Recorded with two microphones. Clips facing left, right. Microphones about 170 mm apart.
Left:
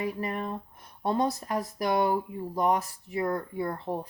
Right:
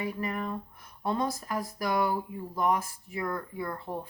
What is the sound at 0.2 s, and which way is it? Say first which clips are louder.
Speech: left 1 dB; 30° left (ahead or behind).